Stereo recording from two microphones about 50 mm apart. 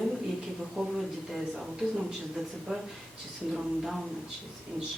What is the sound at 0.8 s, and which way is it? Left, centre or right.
Speech, right.